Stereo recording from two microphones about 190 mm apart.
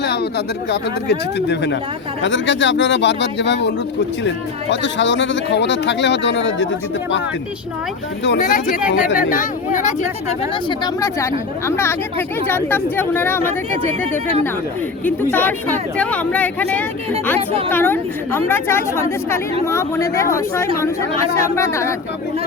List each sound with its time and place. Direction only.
0.0 s speech: 60° left (ahead or behind)
8.4 s speech: 45° left (ahead or behind)
10.5 s speech: 25° left (ahead or behind)
15.0 s speech: 10° left (ahead or behind)